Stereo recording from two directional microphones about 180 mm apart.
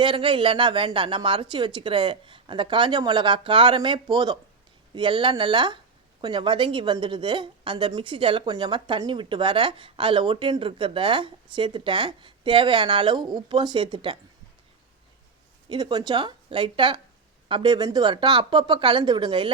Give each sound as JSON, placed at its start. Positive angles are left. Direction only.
{"t": 0.0, "sound": "a woman's voice", "side_deg": -30}
{"t": 15.7, "sound": "a woman's voice", "side_deg": -20}